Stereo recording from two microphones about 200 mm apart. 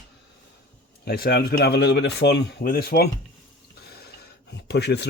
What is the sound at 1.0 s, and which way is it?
Speech, 50° left (ahead or behind).